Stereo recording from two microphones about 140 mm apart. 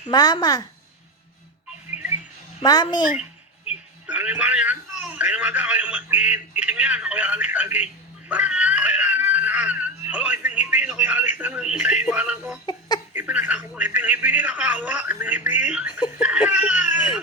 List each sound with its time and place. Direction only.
0.1 s a child's voice: 30° left (ahead or behind)
2.6 s speech: 30° left (ahead or behind)
4.0 s speech: 10° right (ahead or behind)